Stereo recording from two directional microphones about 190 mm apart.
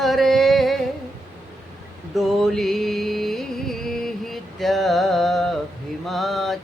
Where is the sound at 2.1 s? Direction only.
Centre (ahead or behind).